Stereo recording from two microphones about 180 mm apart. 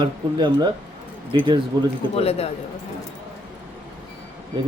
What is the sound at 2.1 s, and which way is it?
Speech, 35° left (ahead or behind).